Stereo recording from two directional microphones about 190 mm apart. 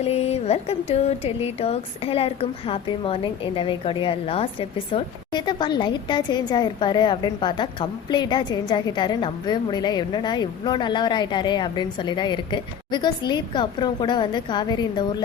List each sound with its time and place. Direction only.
0.0 s a woman's voice: 35° left (ahead or behind)